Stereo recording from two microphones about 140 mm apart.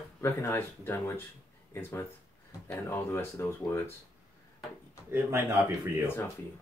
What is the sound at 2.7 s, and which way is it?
Speech, 15° left (ahead or behind).